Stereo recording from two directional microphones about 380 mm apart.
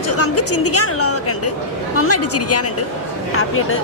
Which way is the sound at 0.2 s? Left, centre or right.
Left.